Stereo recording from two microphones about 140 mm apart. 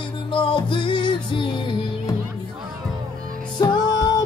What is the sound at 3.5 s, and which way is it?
Music, 30° left (ahead or behind).